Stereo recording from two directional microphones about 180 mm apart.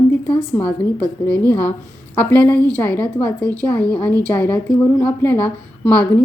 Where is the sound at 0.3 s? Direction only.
10° left (ahead or behind).